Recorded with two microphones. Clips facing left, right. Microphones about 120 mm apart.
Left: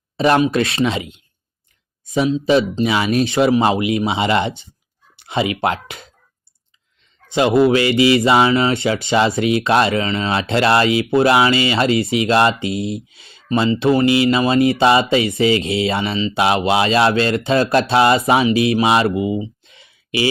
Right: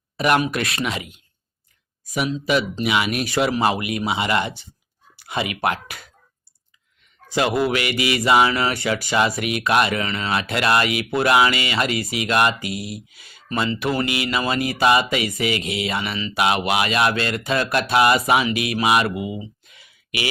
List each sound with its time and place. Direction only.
0.2 s speech: 25° left (ahead or behind)
7.3 s speech: 25° left (ahead or behind)